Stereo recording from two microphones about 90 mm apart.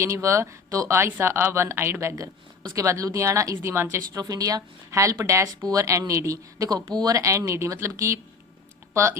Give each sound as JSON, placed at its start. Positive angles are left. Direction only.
{"t": 0.0, "sound": "speech", "side_deg": -35}
{"t": 4.1, "sound": "speech", "side_deg": -40}